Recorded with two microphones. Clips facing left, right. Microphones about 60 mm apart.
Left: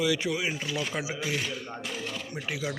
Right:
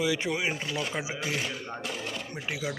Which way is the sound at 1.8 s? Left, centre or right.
Centre.